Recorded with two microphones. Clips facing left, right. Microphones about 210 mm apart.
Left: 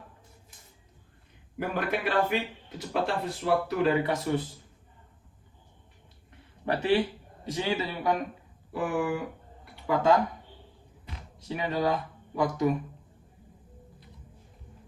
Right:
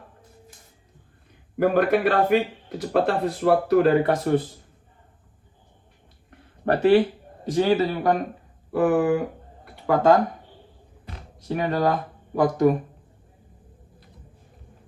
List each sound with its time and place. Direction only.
1.5 s speech: 50° right (ahead or behind)
6.7 s speech: 50° right (ahead or behind)
11.4 s speech: 55° right (ahead or behind)